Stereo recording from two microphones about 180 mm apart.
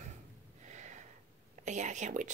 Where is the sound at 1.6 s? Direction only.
40° right (ahead or behind).